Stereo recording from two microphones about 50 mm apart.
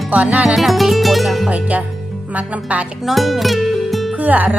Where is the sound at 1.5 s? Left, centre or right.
Right.